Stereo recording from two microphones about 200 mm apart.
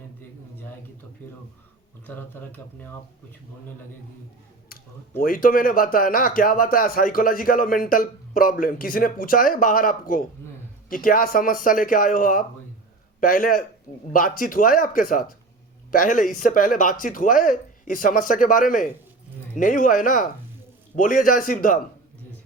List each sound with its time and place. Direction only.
1.2 s speech: 10° left (ahead or behind)
5.2 s speech: 45° left (ahead or behind)